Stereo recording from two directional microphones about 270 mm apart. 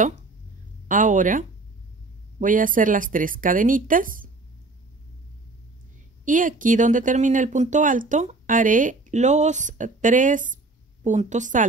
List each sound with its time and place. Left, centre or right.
0.8 s speech: right
2.4 s speech: right
6.2 s speech: right